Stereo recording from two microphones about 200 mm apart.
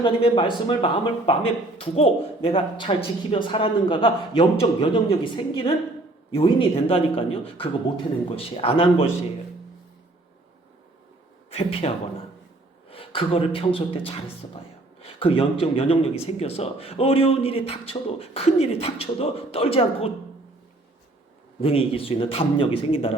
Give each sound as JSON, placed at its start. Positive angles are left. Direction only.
{"t": 0.0, "sound": "speech", "side_deg": 25}
{"t": 8.4, "sound": "speech", "side_deg": 30}
{"t": 11.5, "sound": "speech", "side_deg": 30}
{"t": 21.6, "sound": "speech", "side_deg": 30}